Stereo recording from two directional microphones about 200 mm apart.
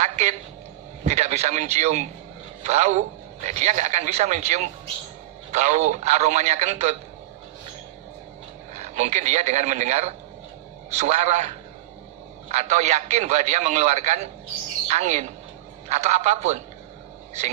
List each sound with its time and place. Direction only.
0.0 s a man's voice: 35° right (ahead or behind)
8.7 s a man's voice: 35° right (ahead or behind)